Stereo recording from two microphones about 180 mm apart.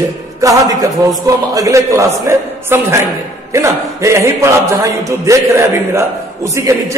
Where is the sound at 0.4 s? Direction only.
20° right (ahead or behind).